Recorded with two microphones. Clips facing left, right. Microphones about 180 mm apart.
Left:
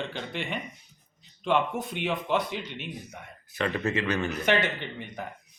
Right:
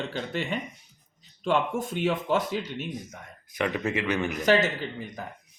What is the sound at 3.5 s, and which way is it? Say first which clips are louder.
Speech: right 1 dB; 15° right (ahead or behind).